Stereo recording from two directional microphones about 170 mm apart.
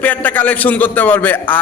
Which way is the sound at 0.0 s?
10° left (ahead or behind).